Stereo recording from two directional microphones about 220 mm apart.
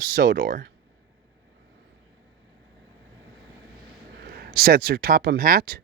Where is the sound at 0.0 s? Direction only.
40° right (ahead or behind).